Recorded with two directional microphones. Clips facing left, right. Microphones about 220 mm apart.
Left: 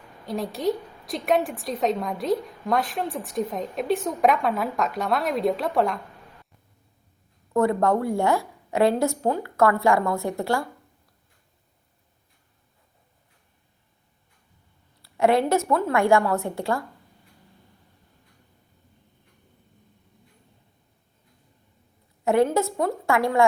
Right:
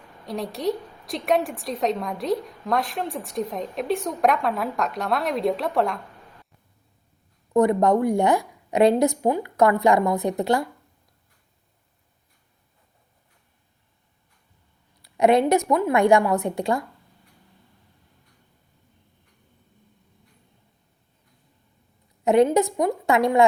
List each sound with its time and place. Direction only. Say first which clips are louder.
0.3 s a woman's voice: left 1 dB; centre (ahead or behind)
7.5 s a woman's voice: right 3 dB; 15° right (ahead or behind)
15.0 s a woman's voice: right 2 dB; 20° right (ahead or behind)
22.2 s a woman's voice: right 3 dB; 20° right (ahead or behind)